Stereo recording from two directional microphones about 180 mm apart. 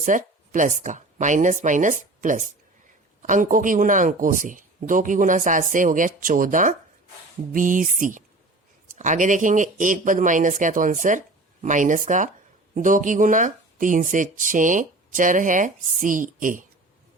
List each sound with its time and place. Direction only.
0.0 s speech: 45° right (ahead or behind)